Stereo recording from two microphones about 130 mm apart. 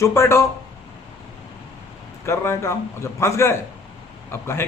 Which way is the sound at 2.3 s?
20° left (ahead or behind).